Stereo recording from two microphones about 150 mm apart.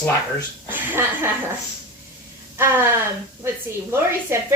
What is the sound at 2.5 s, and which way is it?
Speech, 15° right (ahead or behind).